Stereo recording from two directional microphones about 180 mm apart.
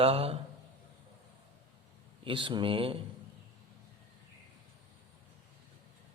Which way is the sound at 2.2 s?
30° right (ahead or behind).